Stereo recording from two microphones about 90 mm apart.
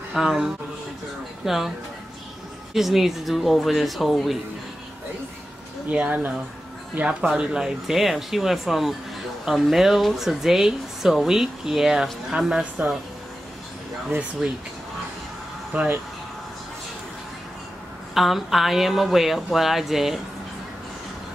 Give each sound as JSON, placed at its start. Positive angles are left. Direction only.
{"t": 0.1, "sound": "speech", "side_deg": 0}
{"t": 2.7, "sound": "speech", "side_deg": -5}
{"t": 5.9, "sound": "speech", "side_deg": -15}
{"t": 14.4, "sound": "speech", "side_deg": -10}
{"t": 15.7, "sound": "speech", "side_deg": -15}
{"t": 18.1, "sound": "speech", "side_deg": 0}